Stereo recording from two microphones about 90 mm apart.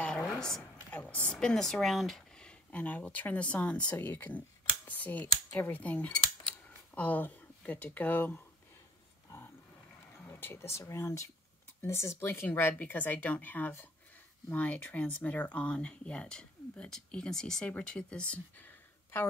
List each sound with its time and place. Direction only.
0.0 s a sound: 10° left (ahead or behind)
0.8 s speech: 20° left (ahead or behind)
10.3 s speech: 25° left (ahead or behind)